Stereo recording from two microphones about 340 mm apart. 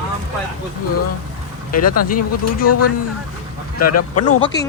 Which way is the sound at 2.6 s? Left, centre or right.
Left.